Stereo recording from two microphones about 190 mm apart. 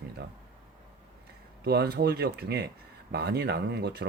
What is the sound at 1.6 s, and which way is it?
Speech, 60° right (ahead or behind).